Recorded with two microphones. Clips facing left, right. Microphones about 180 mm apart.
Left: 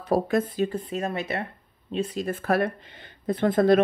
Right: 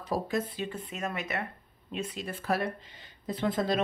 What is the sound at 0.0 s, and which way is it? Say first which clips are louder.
Speech: left 8 dB; 55° left (ahead or behind).